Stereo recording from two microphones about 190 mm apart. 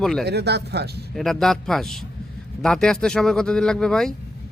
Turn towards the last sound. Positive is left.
turn(degrees=5)  # may be behind; listen again after turning